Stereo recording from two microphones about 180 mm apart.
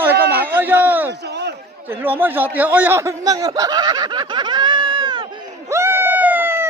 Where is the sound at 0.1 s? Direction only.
60° right (ahead or behind).